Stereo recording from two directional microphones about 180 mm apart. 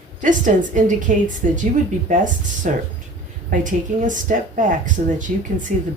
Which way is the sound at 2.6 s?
45° right (ahead or behind).